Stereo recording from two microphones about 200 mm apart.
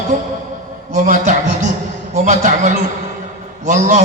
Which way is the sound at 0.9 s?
45° right (ahead or behind).